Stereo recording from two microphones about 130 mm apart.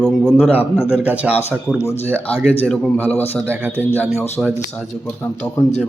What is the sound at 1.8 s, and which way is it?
Speech, 20° left (ahead or behind).